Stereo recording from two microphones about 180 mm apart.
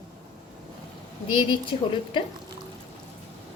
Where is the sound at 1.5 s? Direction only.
25° left (ahead or behind).